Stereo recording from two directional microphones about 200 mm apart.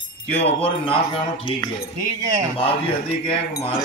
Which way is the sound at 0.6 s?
25° left (ahead or behind).